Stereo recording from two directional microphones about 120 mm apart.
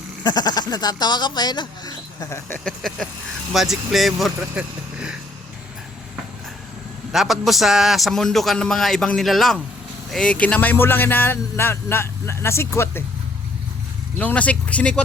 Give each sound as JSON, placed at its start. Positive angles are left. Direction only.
{"t": 0.2, "sound": "speech", "side_deg": 35}
{"t": 2.6, "sound": "a man's voice", "side_deg": 5}
{"t": 7.1, "sound": "a man's voice", "side_deg": 0}
{"t": 14.2, "sound": "a man's voice", "side_deg": 10}